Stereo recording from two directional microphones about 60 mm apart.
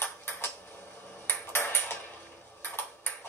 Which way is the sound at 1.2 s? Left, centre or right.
Left.